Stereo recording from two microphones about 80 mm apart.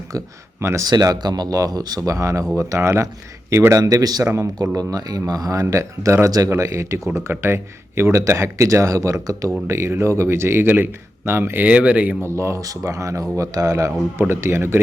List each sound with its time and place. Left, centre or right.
0.6 s speech: right
0.9 s speech: right
11.7 s speech: centre
12.2 s speech: right
14.2 s speech: right